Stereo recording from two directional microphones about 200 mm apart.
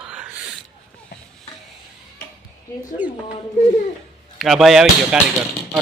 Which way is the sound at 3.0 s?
10° right (ahead or behind).